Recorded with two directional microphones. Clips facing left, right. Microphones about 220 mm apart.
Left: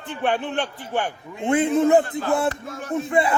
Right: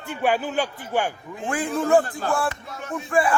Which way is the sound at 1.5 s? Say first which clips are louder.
Left 4 dB; 25° left (ahead or behind).